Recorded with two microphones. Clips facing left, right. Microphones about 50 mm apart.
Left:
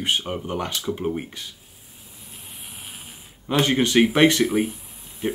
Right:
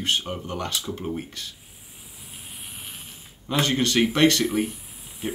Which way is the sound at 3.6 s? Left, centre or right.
Centre.